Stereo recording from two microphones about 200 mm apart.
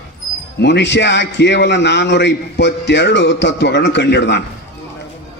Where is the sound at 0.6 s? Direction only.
60° left (ahead or behind).